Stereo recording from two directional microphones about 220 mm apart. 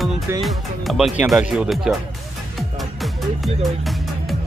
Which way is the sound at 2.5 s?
Centre (ahead or behind).